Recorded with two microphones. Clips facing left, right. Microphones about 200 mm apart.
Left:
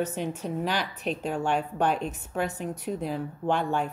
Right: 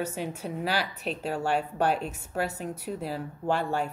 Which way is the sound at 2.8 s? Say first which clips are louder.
Left 3 dB; 5° right (ahead or behind).